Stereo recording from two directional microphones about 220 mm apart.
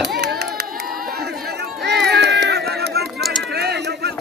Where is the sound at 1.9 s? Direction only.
50° right (ahead or behind).